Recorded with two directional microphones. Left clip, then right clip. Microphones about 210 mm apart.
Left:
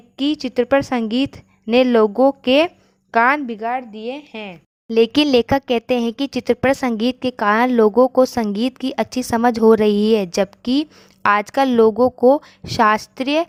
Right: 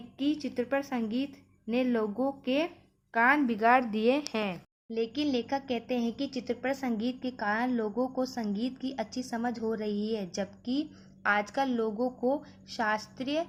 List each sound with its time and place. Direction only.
0.2 s speech: 45° left (ahead or behind)
3.7 s speech: 5° left (ahead or behind)
4.9 s speech: 45° left (ahead or behind)